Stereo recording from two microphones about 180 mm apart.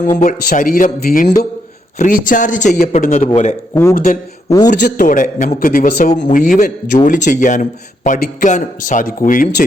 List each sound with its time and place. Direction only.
0.0 s speech: 45° left (ahead or behind)
4.4 s a man's voice: 20° left (ahead or behind)
4.8 s speech: 50° left (ahead or behind)